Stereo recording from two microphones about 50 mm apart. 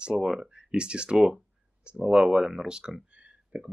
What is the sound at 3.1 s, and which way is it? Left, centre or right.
Clicking, right.